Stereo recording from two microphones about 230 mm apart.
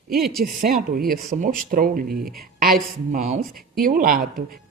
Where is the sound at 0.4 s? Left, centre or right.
Right.